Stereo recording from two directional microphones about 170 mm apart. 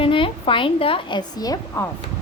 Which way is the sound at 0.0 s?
30° left (ahead or behind).